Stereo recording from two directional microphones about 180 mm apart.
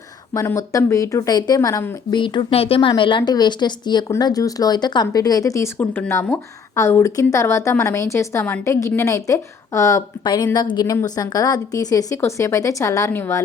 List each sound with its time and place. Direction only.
0.3 s a woman's voice: 15° left (ahead or behind)